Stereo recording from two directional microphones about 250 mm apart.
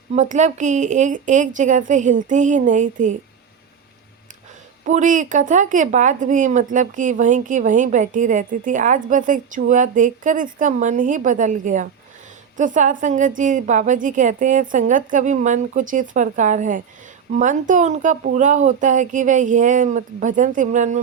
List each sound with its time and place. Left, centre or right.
0.1 s speech: right
4.9 s speech: right